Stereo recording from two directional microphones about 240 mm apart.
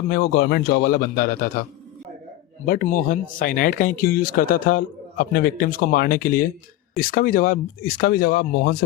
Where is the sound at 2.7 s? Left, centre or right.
Left.